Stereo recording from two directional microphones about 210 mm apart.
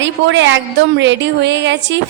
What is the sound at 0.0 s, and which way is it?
A woman's voice, 60° right (ahead or behind).